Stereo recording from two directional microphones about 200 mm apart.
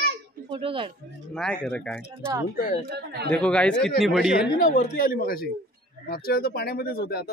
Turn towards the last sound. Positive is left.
turn(degrees=50)  # may be behind; listen again after turning